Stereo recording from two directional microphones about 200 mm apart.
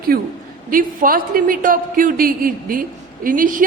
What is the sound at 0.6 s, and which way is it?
A woman's voice, 45° right (ahead or behind).